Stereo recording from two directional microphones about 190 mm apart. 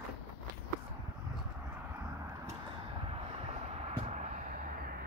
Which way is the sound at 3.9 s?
35° right (ahead or behind).